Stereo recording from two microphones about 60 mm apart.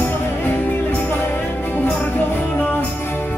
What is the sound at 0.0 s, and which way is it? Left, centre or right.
Music, left.